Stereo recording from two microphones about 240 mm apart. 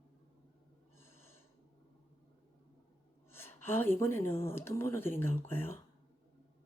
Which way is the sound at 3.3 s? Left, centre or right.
Centre.